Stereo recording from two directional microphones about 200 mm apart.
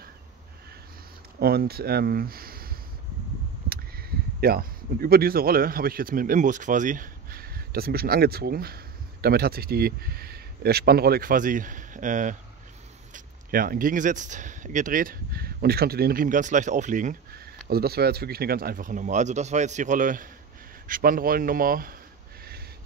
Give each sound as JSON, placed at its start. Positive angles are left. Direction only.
{"t": 1.4, "sound": "speech", "side_deg": -50}